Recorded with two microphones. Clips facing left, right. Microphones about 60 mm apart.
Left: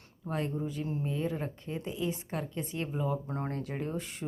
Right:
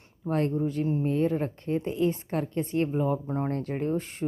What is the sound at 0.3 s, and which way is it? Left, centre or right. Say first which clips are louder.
A woman's voice: right 7 dB; right.